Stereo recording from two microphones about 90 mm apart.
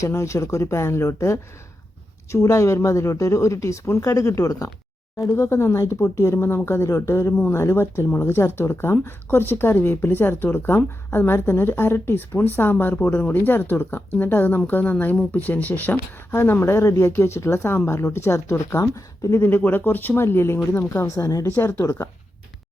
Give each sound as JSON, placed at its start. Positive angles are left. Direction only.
{"t": 0.0, "sound": "speech", "side_deg": 35}
{"t": 19.4, "sound": "speech", "side_deg": 25}
{"t": 21.4, "sound": "speech", "side_deg": 25}